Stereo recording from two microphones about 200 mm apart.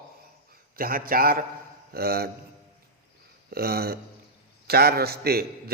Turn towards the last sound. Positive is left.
turn(degrees=-50)  # may be behind; listen again after turning